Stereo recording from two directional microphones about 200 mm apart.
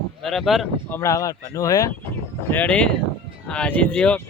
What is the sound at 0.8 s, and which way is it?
Speech, 10° left (ahead or behind).